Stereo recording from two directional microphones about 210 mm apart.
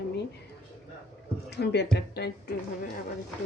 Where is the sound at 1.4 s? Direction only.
55° left (ahead or behind).